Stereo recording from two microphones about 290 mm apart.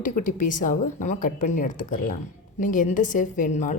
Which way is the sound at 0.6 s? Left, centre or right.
Left.